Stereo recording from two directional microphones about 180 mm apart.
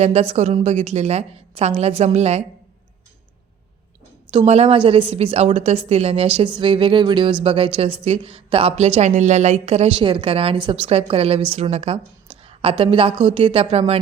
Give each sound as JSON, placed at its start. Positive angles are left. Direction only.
{"t": 0.0, "sound": "a woman's voice", "side_deg": -35}
{"t": 4.3, "sound": "a woman's voice", "side_deg": -30}